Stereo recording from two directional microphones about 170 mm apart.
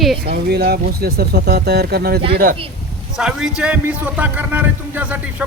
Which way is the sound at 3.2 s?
5° right (ahead or behind).